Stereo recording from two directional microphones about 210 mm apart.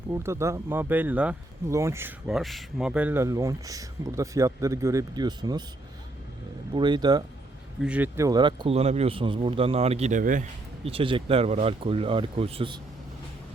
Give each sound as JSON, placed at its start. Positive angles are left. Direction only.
{"t": 0.1, "sound": "speech", "side_deg": -10}
{"t": 6.7, "sound": "speech", "side_deg": -20}
{"t": 7.8, "sound": "speech", "side_deg": -5}
{"t": 10.8, "sound": "speech", "side_deg": -25}